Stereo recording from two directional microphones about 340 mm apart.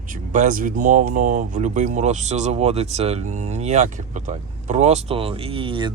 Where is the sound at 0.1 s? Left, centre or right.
Right.